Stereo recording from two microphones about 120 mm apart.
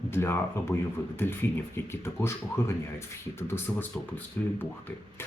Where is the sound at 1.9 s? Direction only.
20° left (ahead or behind).